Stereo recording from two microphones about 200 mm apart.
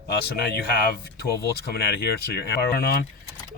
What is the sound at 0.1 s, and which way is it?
Speech, 55° left (ahead or behind).